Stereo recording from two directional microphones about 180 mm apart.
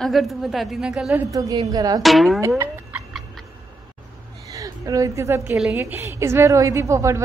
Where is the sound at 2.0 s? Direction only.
Centre (ahead or behind).